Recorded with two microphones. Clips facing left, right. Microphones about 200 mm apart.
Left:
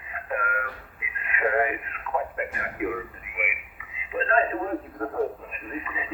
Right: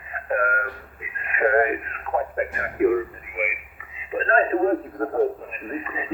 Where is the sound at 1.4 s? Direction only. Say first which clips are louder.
Right 5 dB; 45° right (ahead or behind).